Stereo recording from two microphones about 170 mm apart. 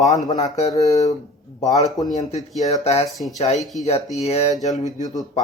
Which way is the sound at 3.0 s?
Centre (ahead or behind).